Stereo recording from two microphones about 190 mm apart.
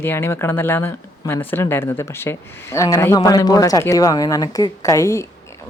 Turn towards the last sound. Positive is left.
turn(degrees=15)  # may be behind; listen again after turning